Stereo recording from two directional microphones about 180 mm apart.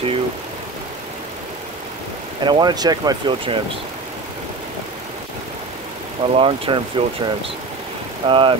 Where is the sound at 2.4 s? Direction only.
25° right (ahead or behind).